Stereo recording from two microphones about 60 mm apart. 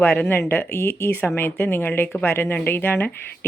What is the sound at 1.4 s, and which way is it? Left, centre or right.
A woman's voice, left.